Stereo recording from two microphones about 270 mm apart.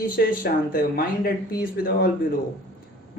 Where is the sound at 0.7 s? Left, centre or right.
Left.